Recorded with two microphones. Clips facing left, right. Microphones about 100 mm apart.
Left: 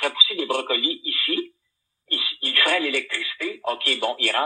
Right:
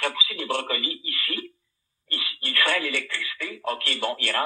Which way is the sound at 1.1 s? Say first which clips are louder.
Left 6 dB; 75° left (ahead or behind).